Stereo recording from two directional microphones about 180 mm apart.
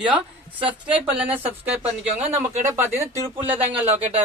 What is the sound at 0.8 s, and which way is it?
Speech, 10° right (ahead or behind).